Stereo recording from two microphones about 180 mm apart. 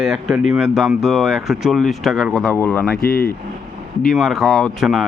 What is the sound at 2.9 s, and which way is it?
Speech, 55° left (ahead or behind).